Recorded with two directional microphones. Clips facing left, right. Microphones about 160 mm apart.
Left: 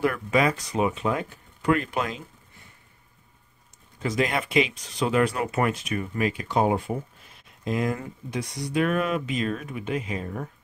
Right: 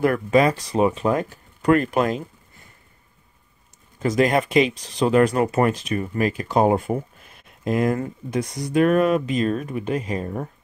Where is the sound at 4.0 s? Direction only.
45° right (ahead or behind).